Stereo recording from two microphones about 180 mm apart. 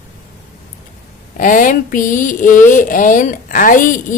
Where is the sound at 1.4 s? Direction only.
50° left (ahead or behind).